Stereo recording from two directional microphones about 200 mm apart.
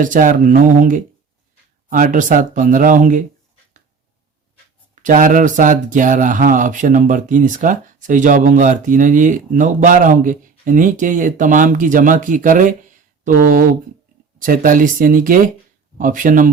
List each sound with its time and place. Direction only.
0.0 s speech: 40° right (ahead or behind)
5.0 s speech: 40° right (ahead or behind)